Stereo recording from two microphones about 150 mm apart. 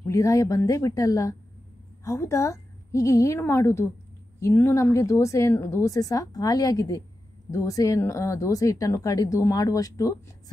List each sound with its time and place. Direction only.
0.0 s a woman's voice: 20° left (ahead or behind)